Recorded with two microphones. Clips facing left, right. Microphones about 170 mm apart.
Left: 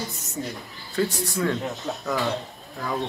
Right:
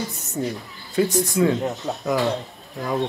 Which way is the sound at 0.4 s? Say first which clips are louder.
Right 6 dB; 45° right (ahead or behind).